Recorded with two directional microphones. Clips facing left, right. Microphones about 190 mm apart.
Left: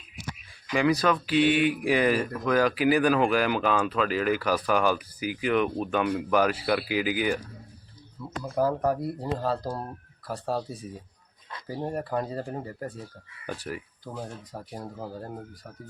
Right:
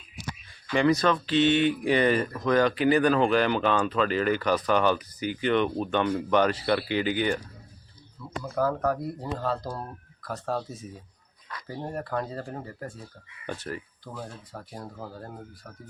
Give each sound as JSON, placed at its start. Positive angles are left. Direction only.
{"t": 1.0, "sound": "speech", "side_deg": 10}
{"t": 8.5, "sound": "speech", "side_deg": 15}
{"t": 11.7, "sound": "speech", "side_deg": 15}